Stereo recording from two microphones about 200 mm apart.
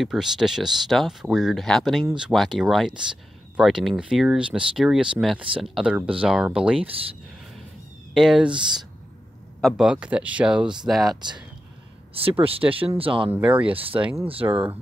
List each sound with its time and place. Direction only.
0.0 s speech: centre (ahead or behind)
8.1 s speech: centre (ahead or behind)
8.5 s speech: 25° right (ahead or behind)
9.6 s speech: centre (ahead or behind)
11.1 s speech: 20° right (ahead or behind)
13.3 s speech: 5° right (ahead or behind)
13.7 s speech: 25° right (ahead or behind)
14.4 s speech: 15° right (ahead or behind)